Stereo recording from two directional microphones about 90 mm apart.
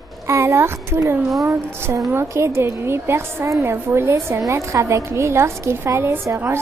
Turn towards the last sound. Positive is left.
turn(degrees=-30)  # may be behind; listen again after turning